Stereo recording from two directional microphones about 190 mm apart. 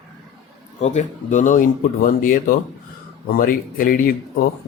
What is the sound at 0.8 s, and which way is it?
Speech, 40° left (ahead or behind).